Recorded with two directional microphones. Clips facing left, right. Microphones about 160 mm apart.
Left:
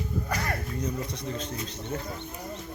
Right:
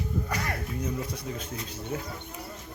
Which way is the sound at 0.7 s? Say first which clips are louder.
Even; 5° right (ahead or behind).